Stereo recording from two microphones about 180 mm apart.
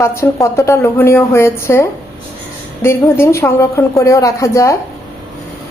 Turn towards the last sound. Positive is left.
turn(degrees=15)  # may be behind; listen again after turning